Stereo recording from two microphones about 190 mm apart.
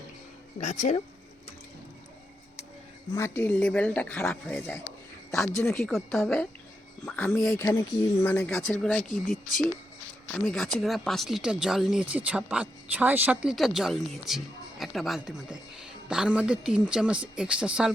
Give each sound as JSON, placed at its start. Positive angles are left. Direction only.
{"t": 0.6, "sound": "speech", "side_deg": 35}
{"t": 3.2, "sound": "speech", "side_deg": 10}
{"t": 5.7, "sound": "speech", "side_deg": 0}
{"t": 7.6, "sound": "speech", "side_deg": 15}
{"t": 10.3, "sound": "speech", "side_deg": 0}